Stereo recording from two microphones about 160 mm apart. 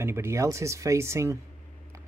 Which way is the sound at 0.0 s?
15° right (ahead or behind).